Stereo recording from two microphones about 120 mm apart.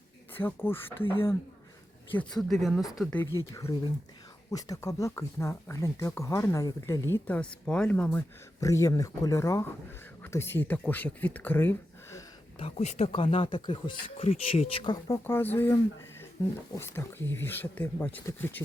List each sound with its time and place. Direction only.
0.3 s speech: 20° left (ahead or behind)
2.3 s speech: centre (ahead or behind)
3.5 s speech: 25° left (ahead or behind); by 8.2 s 10° left (ahead or behind)
8.6 s speech: 25° left (ahead or behind)
12.5 s speech: 55° left (ahead or behind)
13.1 s speech: 50° left (ahead or behind)
14.3 s speech: 55° left (ahead or behind)
14.9 s speech: 25° left (ahead or behind)